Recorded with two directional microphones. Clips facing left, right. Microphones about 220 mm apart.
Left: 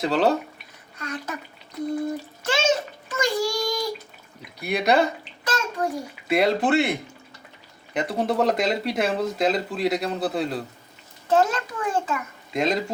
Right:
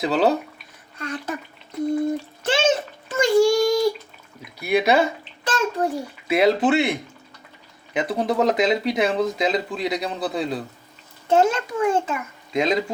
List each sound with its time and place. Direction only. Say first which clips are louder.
0.0 s speech: right 1 dB; centre (ahead or behind)
0.9 s a sound: right 3 dB; 30° right (ahead or behind)
2.4 s a sound: right 2 dB; 30° right (ahead or behind)
4.6 s speech: right 2 dB; 5° right (ahead or behind)
5.5 s bathtub: right 3 dB; 30° right (ahead or behind)
6.2 s speech: right 3 dB; centre (ahead or behind)
8.0 s speech: right 1 dB; centre (ahead or behind)
11.3 s a child's voice: right 3 dB; 25° right (ahead or behind)
12.5 s speech: right 2 dB; centre (ahead or behind)